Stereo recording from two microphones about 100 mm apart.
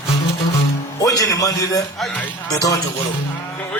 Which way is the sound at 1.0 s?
35° left (ahead or behind).